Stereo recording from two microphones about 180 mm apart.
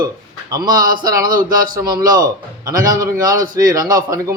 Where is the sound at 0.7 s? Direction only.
50° right (ahead or behind).